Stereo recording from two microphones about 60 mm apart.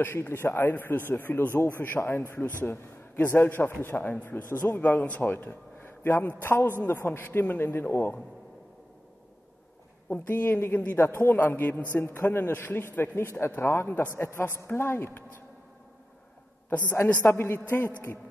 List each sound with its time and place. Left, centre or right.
0.0 s a man's voice: left
10.0 s a man's voice: left
17.3 s a man's voice: left